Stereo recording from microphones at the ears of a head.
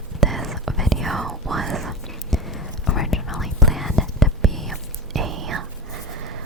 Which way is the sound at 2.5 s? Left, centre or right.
Left.